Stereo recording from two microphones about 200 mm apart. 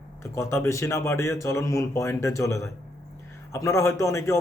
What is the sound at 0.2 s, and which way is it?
Speech, 15° left (ahead or behind).